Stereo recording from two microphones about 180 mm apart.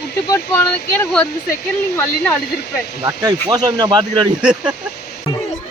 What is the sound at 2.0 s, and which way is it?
Speech, 10° left (ahead or behind).